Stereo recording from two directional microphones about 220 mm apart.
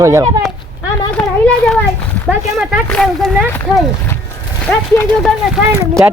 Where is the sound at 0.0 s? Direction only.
15° right (ahead or behind).